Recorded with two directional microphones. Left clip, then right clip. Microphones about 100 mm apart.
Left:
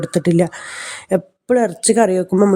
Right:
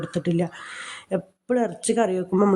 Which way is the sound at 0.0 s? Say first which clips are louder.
Left 10 dB; 65° left (ahead or behind).